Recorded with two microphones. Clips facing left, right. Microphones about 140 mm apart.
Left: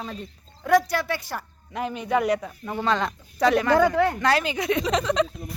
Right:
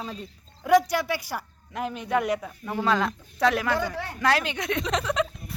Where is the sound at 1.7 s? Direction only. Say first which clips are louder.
Left 2 dB; centre (ahead or behind).